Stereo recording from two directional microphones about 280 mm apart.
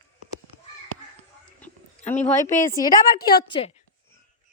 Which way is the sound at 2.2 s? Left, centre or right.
Centre.